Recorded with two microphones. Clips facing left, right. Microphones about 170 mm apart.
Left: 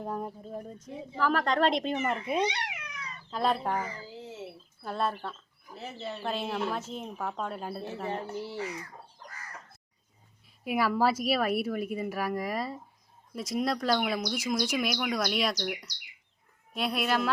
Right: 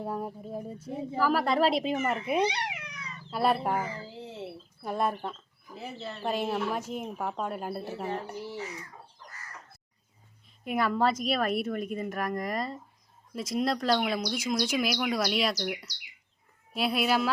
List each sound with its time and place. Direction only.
0.0 s speech: 5° right (ahead or behind)
2.4 s cat: 30° right (ahead or behind)
3.2 s speech: 10° right (ahead or behind)
4.0 s a sound: 30° right (ahead or behind)
4.8 s speech: 15° right (ahead or behind)
10.6 s speech: 5° left (ahead or behind)